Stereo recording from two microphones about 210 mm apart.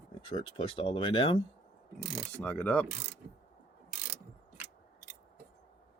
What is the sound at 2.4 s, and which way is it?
Mechanisms, 5° left (ahead or behind).